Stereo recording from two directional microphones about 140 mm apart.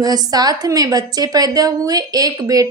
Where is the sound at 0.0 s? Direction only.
25° right (ahead or behind).